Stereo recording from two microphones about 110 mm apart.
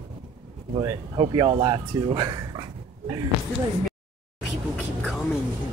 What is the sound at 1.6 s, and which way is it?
Speech, 40° right (ahead or behind).